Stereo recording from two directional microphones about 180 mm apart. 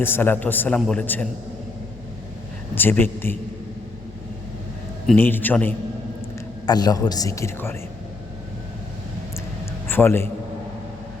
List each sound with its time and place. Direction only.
0.0 s a man's voice: 10° left (ahead or behind)
2.7 s a man's voice: 10° left (ahead or behind)
5.0 s a man's voice: 10° left (ahead or behind)
6.7 s a man's voice: 20° left (ahead or behind)
9.9 s a man's voice: 15° left (ahead or behind)